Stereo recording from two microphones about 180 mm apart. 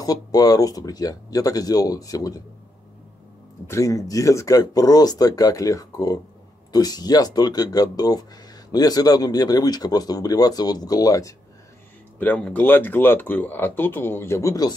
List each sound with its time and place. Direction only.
0.0 s speech: 20° left (ahead or behind)
3.6 s speech: 15° left (ahead or behind)
12.2 s speech: 10° left (ahead or behind)